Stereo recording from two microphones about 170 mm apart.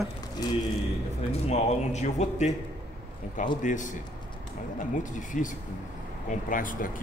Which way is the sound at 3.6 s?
50° left (ahead or behind).